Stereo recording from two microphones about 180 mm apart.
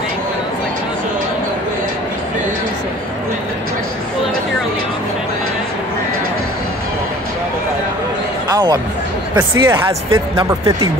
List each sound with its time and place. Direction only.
8.5 s music: 20° right (ahead or behind)
9.4 s speech: 15° right (ahead or behind)